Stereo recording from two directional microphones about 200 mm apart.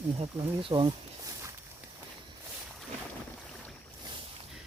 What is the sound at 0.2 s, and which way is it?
Speech, 25° right (ahead or behind).